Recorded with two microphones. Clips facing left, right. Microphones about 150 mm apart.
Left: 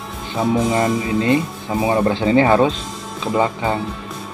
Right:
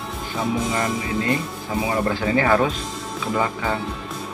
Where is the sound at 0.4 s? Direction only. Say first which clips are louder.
Left 6 dB; 25° left (ahead or behind).